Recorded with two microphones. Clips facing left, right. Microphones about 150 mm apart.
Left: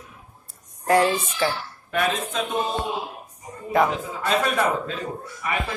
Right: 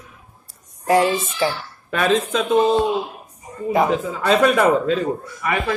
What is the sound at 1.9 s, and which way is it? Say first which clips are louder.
Speech: right 6 dB; 90° right.